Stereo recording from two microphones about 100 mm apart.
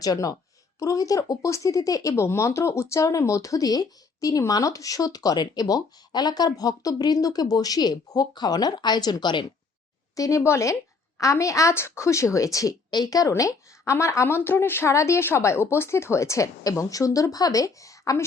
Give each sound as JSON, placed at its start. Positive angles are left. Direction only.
{"t": 0.0, "sound": "a woman's voice", "side_deg": 35}
{"t": 10.2, "sound": "a woman's voice", "side_deg": 35}